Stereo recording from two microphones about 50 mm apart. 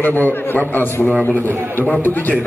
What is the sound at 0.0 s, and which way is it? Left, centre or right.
A man's voice, left.